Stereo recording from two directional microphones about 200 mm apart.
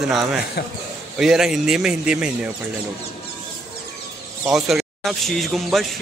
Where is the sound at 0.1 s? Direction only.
Centre (ahead or behind).